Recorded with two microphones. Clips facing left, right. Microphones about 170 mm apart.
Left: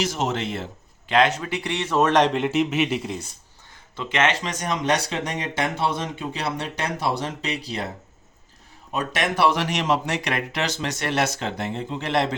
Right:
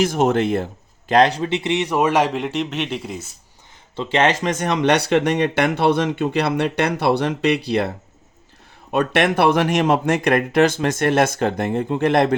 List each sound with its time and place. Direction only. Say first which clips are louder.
0.0 s a man's voice: right 8 dB; 55° right (ahead or behind); by 3.2 s centre (ahead or behind)
3.9 s speech: right 5 dB; 30° right (ahead or behind)
4.4 s speech: right 6 dB; 65° right (ahead or behind)
8.9 s speech: right 8 dB; 60° right (ahead or behind)